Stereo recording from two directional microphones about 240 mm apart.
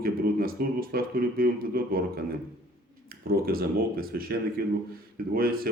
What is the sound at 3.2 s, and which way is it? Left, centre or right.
Speech, right.